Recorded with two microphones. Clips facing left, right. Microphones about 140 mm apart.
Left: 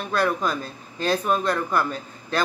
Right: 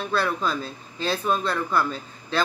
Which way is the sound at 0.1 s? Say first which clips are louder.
Left 3 dB; 15° left (ahead or behind).